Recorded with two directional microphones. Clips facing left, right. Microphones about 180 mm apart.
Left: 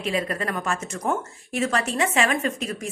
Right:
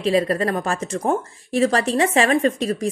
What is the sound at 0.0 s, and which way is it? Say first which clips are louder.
Speech: right 7 dB; 35° right (ahead or behind).